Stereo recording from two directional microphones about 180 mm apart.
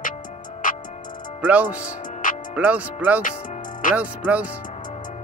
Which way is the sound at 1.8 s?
45° left (ahead or behind).